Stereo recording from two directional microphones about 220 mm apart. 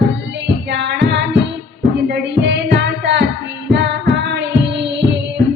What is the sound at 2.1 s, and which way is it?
Music, 55° right (ahead or behind).